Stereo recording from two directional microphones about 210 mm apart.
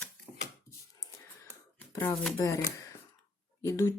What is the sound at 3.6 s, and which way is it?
Speech, 15° left (ahead or behind).